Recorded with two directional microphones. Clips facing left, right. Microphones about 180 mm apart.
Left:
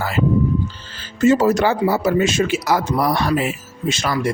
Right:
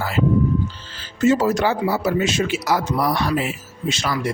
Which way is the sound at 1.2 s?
45° left (ahead or behind).